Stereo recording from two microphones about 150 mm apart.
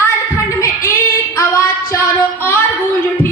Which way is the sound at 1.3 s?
20° left (ahead or behind).